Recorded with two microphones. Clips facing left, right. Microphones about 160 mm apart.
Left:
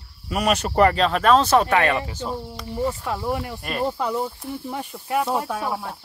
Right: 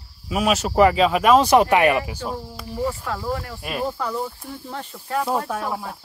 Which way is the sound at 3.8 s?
25° left (ahead or behind).